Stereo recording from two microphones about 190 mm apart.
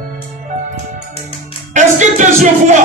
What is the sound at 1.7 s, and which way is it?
Music, 40° right (ahead or behind).